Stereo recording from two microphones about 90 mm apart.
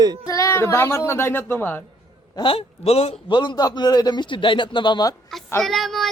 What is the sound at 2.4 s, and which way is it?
A man's voice, 90° left.